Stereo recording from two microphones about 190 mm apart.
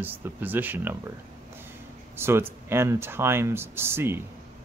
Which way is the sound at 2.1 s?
10° right (ahead or behind).